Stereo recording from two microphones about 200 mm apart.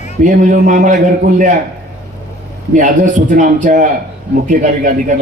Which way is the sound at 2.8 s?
40° right (ahead or behind).